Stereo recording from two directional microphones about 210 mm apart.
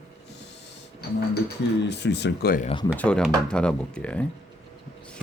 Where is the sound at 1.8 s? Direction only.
55° left (ahead or behind).